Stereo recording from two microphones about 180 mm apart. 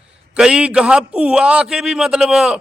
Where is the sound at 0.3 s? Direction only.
5° right (ahead or behind).